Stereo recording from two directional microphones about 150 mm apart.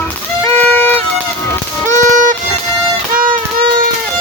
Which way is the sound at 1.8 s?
55° right (ahead or behind).